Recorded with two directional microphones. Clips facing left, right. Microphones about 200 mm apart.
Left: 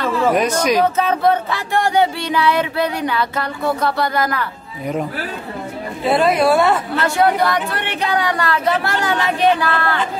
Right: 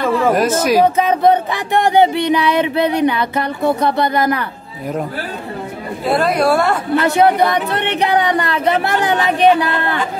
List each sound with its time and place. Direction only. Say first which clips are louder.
0.3 s speech: right 1 dB; 5° right (ahead or behind); by 4.5 s 20° right (ahead or behind)
6.0 s a woman's voice: even; centre (ahead or behind)
7.0 s speech: right 5 dB; 20° right (ahead or behind)